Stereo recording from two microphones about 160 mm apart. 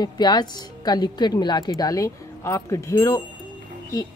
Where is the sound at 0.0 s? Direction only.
25° left (ahead or behind).